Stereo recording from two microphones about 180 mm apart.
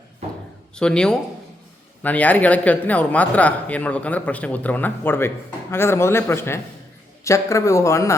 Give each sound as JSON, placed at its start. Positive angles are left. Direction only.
{"t": 0.8, "sound": "a man's voice", "side_deg": 5}